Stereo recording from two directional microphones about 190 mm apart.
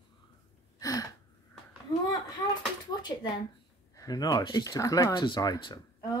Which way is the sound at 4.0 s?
20° left (ahead or behind).